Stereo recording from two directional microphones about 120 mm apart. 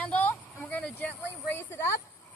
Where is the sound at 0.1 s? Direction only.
15° left (ahead or behind).